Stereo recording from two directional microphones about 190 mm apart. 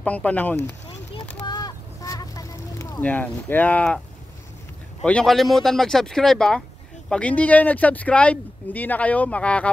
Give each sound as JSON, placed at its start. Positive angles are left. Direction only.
{"t": 0.0, "sound": "speech", "side_deg": 5}
{"t": 1.4, "sound": "vehicle", "side_deg": 20}
{"t": 5.0, "sound": "speech", "side_deg": 5}